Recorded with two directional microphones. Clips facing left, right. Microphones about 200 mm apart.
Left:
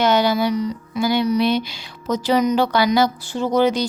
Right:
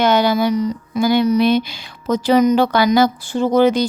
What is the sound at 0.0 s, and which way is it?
A woman's voice, 50° right (ahead or behind).